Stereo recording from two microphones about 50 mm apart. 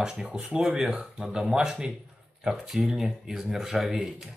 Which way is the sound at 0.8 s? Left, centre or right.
Centre.